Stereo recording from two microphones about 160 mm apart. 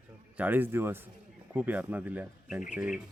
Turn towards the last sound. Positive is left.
turn(degrees=-5)  # may be behind; listen again after turning